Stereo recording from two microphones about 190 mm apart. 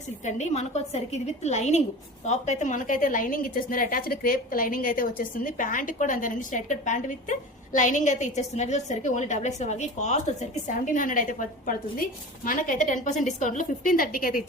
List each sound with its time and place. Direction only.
0.3 s a woman's voice: 40° left (ahead or behind)